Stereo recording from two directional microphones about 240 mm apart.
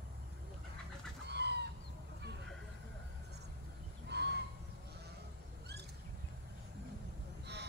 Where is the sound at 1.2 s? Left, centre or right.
Right.